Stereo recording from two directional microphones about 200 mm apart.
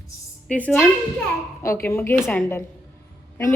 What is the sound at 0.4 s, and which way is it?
A woman's voice, 5° left (ahead or behind).